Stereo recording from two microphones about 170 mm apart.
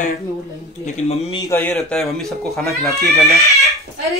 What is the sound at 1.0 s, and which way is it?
Speech, 35° left (ahead or behind).